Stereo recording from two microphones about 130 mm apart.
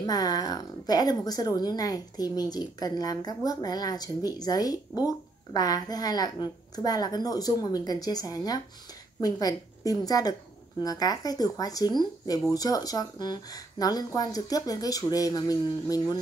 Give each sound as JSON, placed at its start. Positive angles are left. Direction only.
{"t": 0.0, "sound": "a woman's voice", "side_deg": 30}